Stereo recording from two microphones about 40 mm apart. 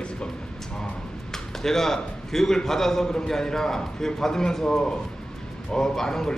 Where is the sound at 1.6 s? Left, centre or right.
Centre.